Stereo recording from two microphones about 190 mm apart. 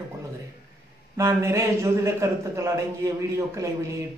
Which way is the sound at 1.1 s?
15° right (ahead or behind).